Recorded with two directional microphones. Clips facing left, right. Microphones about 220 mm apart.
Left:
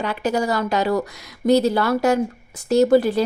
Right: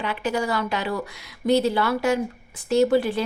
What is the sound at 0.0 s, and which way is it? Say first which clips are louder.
A woman's voice: left 4 dB; 40° left (ahead or behind).